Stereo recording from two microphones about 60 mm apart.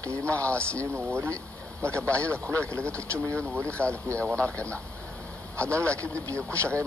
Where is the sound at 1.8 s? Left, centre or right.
Left.